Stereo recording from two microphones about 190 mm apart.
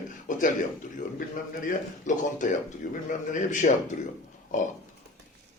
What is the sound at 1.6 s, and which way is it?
A man's voice, 45° left (ahead or behind).